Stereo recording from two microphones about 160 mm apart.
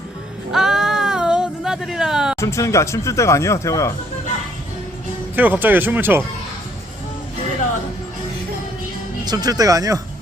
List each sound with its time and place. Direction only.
0.5 s a sound: 5° right (ahead or behind)
2.3 s speech: 20° left (ahead or behind)
5.4 s speech: 10° right (ahead or behind)
9.2 s speech: 25° right (ahead or behind)